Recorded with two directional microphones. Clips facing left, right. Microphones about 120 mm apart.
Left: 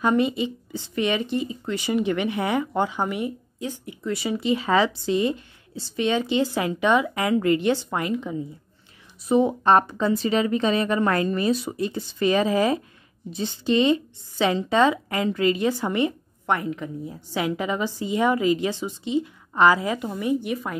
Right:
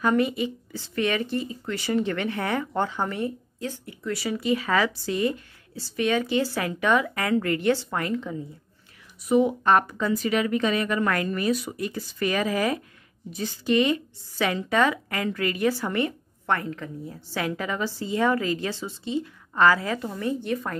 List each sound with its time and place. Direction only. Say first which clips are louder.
0.0 s speech: left 1 dB; 20° left (ahead or behind)
9.2 s speech: left 1 dB; 30° left (ahead or behind); by 20.7 s 10° left (ahead or behind)